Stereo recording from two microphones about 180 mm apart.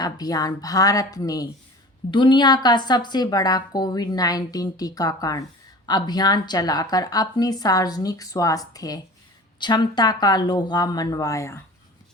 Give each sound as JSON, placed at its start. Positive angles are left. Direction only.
{"t": 0.0, "sound": "a woman's voice", "side_deg": 20}